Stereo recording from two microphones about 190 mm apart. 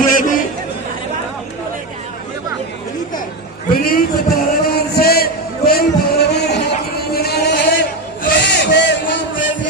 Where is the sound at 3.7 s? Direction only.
50° left (ahead or behind).